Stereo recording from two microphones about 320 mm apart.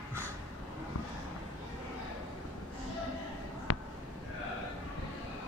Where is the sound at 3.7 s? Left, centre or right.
Left.